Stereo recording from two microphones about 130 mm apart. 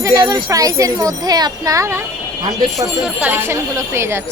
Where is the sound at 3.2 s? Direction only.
15° right (ahead or behind).